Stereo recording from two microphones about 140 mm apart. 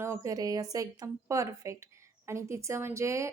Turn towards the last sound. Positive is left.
turn(degrees=-20)  # may be behind; listen again after turning